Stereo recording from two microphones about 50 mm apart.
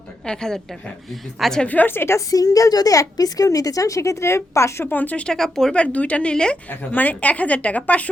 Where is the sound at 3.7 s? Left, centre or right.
Left.